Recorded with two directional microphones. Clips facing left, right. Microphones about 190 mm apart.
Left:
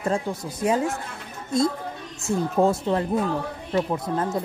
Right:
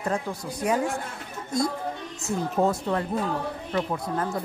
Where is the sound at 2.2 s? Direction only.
25° left (ahead or behind).